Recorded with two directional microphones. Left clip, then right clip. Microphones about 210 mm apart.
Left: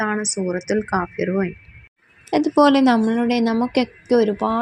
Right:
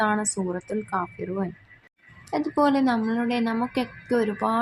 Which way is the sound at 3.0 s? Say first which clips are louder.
Left 6 dB; 25° left (ahead or behind).